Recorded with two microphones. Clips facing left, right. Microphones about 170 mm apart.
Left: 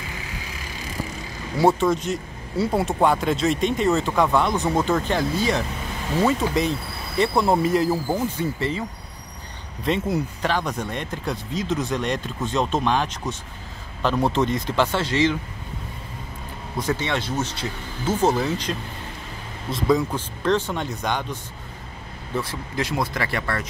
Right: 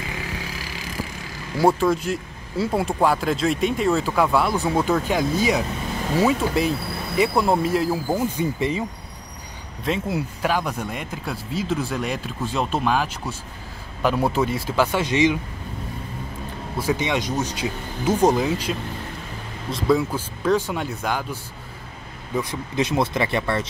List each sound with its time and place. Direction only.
1.6 s speech: centre (ahead or behind)
8.4 s speech: 15° right (ahead or behind)
9.8 s speech: centre (ahead or behind)
16.7 s speech: 10° right (ahead or behind)
22.3 s speech: 15° right (ahead or behind)